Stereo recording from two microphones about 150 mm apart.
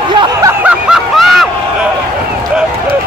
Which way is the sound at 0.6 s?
5° right (ahead or behind).